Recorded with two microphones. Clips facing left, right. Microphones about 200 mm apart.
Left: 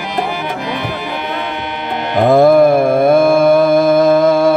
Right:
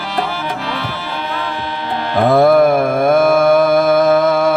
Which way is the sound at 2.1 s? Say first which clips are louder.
Left 2 dB; 20° left (ahead or behind).